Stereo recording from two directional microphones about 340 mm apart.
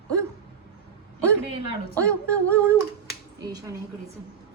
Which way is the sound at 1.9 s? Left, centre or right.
Centre.